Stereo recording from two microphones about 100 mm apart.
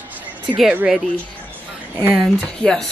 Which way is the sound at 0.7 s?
10° right (ahead or behind).